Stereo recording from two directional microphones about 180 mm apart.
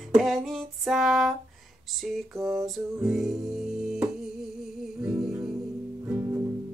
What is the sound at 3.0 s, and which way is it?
Music, centre (ahead or behind).